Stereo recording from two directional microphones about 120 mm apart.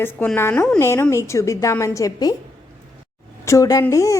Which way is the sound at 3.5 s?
30° left (ahead or behind).